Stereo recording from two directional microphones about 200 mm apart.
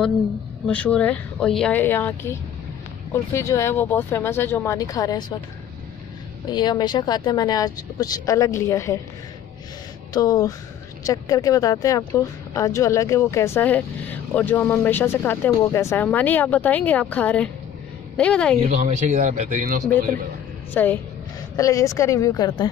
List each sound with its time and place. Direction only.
0.7 s speech: 10° left (ahead or behind)
6.5 s a woman's voice: 20° left (ahead or behind)
10.1 s a woman's voice: 20° left (ahead or behind)
18.6 s a man's voice: 35° right (ahead or behind)
20.7 s speech: 10° left (ahead or behind)